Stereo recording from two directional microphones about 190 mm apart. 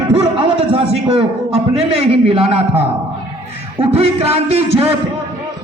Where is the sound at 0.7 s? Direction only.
30° right (ahead or behind).